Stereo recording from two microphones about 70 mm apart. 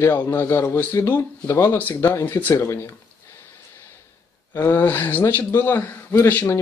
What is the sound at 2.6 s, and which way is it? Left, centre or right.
Speech, left.